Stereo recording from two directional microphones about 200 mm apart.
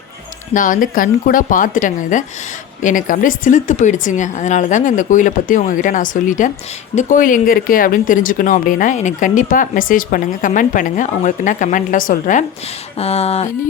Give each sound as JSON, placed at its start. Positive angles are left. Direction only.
{"t": 0.5, "sound": "speech", "side_deg": 40}